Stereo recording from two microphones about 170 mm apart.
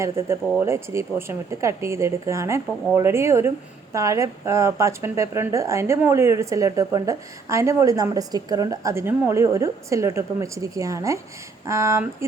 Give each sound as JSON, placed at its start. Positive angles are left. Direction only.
{"t": 0.0, "sound": "speech", "side_deg": -15}